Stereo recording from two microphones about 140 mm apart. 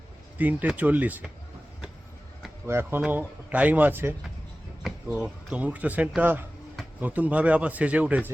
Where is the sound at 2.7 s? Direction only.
15° right (ahead or behind).